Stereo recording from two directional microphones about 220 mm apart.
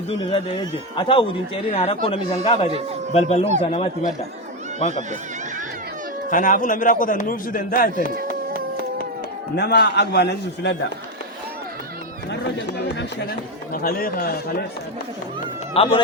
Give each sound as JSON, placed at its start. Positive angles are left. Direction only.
{"t": 0.3, "sound": "a man's voice", "side_deg": 20}
{"t": 6.3, "sound": "a man's voice", "side_deg": 35}
{"t": 9.6, "sound": "a man's voice", "side_deg": 45}
{"t": 12.3, "sound": "a man's voice", "side_deg": 50}
{"t": 15.7, "sound": "speech", "side_deg": 25}